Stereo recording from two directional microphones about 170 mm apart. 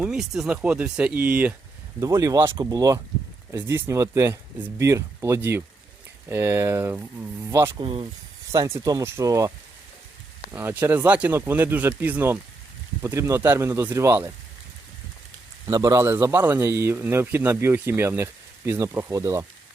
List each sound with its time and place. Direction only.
0.0 s a man's voice: 5° right (ahead or behind)
2.0 s a man's voice: 20° right (ahead or behind)
7.8 s speech: 30° right (ahead or behind)
8.5 s speech: 15° right (ahead or behind)
10.5 s a man's voice: 15° right (ahead or behind)
15.6 s a man's voice: 20° right (ahead or behind)